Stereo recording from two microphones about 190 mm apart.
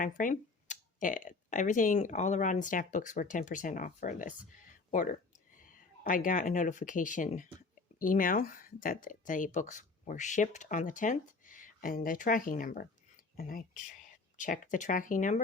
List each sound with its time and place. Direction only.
0.0 s speech: 45° left (ahead or behind)
6.0 s speech: 45° left (ahead or behind)